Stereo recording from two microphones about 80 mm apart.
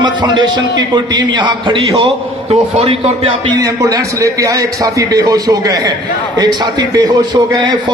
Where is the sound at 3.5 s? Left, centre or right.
Right.